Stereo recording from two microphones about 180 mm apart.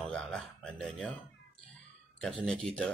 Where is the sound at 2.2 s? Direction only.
5° left (ahead or behind).